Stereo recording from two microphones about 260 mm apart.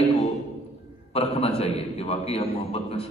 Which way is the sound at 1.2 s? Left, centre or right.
Left.